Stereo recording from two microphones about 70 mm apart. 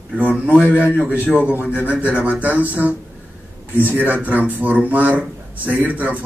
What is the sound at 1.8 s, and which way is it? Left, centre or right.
Speech, centre.